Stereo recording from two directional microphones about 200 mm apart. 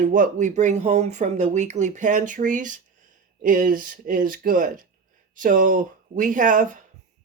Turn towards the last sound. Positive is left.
turn(degrees=-40)  # may be behind; listen again after turning